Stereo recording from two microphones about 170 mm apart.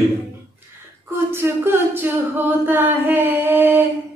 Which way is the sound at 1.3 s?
15° right (ahead or behind).